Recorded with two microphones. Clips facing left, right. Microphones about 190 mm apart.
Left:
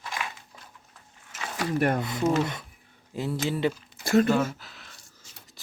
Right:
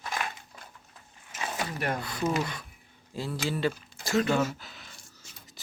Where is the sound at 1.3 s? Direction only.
20° right (ahead or behind).